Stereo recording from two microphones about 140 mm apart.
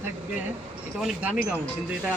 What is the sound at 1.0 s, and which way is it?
Speech, 10° right (ahead or behind).